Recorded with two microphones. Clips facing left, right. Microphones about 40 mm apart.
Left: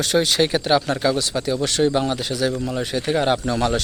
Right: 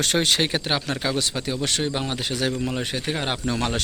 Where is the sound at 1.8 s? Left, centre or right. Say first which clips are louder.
Left 7 dB; centre.